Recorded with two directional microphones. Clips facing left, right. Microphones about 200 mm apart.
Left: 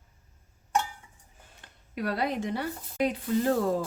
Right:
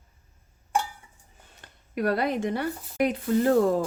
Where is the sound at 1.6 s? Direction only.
50° right (ahead or behind).